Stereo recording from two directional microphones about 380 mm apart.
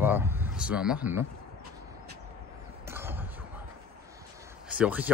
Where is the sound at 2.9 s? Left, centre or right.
Centre.